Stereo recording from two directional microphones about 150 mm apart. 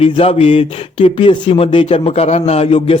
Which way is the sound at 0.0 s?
40° left (ahead or behind).